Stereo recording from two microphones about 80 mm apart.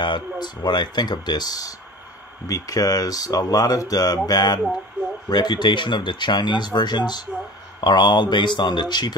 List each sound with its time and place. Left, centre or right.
0.0 s speech: left